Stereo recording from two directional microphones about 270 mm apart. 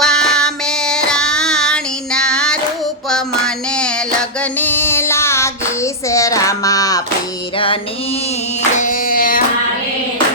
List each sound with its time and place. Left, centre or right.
0.0 s child singing: centre
3.1 s a sound: centre
8.7 s music: left